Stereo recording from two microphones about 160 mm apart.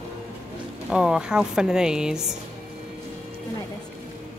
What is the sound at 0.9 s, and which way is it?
Speech, 5° right (ahead or behind).